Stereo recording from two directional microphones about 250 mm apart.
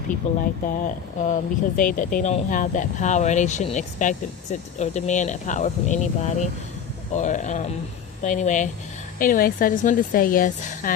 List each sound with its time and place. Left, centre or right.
0.3 s speech: left